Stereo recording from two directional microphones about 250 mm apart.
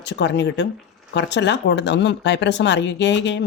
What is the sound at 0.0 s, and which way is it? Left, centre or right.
Speech, left.